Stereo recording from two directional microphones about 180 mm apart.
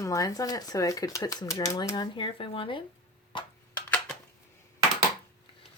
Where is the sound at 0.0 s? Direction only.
20° left (ahead or behind).